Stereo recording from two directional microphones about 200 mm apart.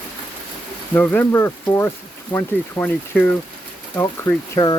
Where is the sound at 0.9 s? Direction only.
10° left (ahead or behind).